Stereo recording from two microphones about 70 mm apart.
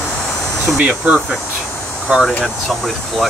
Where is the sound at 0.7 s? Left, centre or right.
Right.